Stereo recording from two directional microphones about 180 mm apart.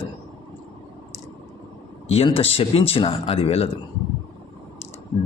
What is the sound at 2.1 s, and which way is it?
Speech, 30° left (ahead or behind).